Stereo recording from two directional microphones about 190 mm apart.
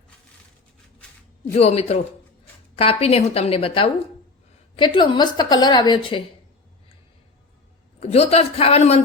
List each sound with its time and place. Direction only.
1.5 s a woman's voice: 35° left (ahead or behind)
7.9 s speech: 35° left (ahead or behind)